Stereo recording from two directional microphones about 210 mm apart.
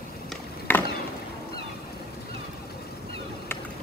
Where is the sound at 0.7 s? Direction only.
10° left (ahead or behind).